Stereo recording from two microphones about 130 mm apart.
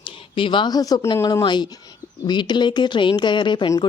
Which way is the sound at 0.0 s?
40° left (ahead or behind).